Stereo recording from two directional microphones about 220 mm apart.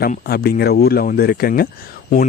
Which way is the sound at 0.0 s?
45° left (ahead or behind).